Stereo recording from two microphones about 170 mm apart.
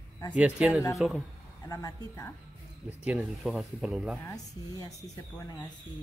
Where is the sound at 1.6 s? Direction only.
20° left (ahead or behind).